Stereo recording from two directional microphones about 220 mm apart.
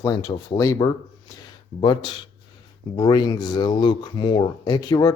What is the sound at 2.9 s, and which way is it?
Speech, 20° left (ahead or behind).